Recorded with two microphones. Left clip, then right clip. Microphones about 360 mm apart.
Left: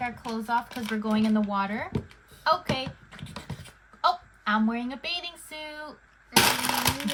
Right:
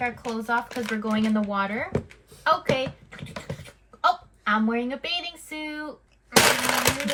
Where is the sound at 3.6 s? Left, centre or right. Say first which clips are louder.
Right 2 dB; centre.